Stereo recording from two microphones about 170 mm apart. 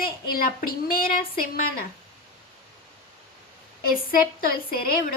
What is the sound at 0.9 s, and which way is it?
Speech, 60° left (ahead or behind).